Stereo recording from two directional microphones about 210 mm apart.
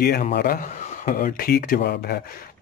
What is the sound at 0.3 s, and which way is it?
Speech, 50° left (ahead or behind).